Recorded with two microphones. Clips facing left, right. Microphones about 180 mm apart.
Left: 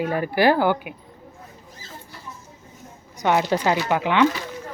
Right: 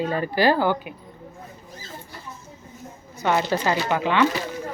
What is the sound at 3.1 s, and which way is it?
A woman's voice, 15° left (ahead or behind).